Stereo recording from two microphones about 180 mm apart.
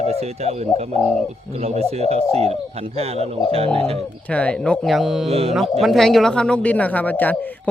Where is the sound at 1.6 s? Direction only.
35° right (ahead or behind).